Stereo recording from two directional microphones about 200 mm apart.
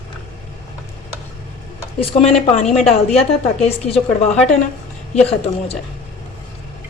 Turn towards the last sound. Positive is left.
turn(degrees=30)  # may be behind; listen again after turning